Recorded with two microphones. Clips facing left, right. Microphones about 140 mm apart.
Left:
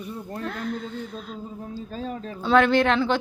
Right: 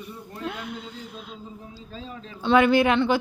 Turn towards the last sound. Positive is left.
turn(degrees=-5)  # may be behind; listen again after turning